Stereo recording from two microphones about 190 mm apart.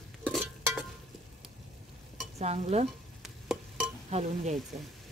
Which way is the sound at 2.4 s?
35° right (ahead or behind).